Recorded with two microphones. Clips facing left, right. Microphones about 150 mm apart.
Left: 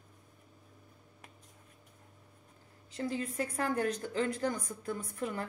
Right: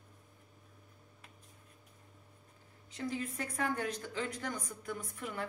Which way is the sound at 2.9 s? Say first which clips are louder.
Left 3 dB; 35° left (ahead or behind).